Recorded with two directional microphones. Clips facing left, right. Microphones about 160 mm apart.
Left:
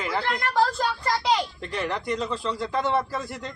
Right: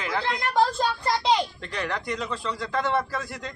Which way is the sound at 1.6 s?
5° left (ahead or behind).